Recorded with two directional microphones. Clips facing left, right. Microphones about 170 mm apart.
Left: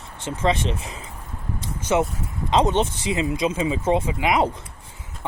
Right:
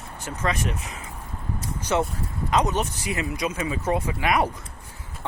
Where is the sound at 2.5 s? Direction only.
25° left (ahead or behind).